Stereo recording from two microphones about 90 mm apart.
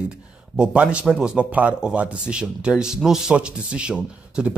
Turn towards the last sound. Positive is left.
turn(degrees=-10)  # may be behind; listen again after turning